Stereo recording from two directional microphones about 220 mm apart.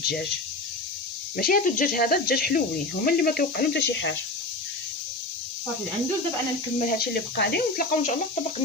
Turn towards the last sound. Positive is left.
turn(degrees=45)  # may be behind; listen again after turning